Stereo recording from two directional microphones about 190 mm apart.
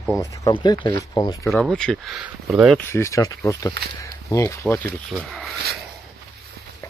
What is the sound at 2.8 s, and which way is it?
Speech, 15° left (ahead or behind).